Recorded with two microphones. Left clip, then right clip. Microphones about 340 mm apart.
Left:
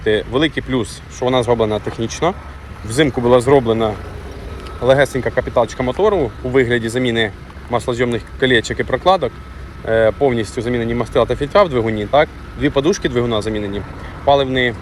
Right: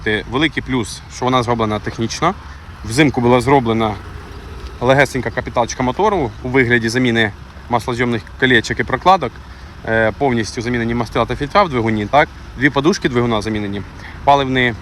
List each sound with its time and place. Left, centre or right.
0.0 s speech: centre
2.0 s speech: right
2.9 s speech: centre